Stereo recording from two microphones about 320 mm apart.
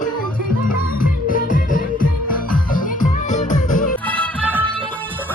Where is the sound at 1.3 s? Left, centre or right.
Left.